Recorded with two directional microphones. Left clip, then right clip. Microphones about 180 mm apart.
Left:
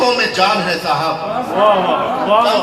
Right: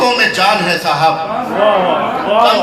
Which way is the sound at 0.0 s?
55° right (ahead or behind).